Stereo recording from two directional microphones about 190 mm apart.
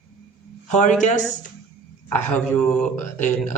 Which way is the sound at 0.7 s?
40° left (ahead or behind).